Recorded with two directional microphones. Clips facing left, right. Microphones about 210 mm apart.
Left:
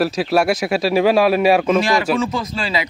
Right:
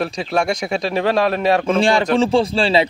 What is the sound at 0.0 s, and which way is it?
Speech, 5° left (ahead or behind).